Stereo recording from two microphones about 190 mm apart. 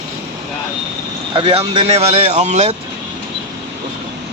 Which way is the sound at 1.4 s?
30° right (ahead or behind).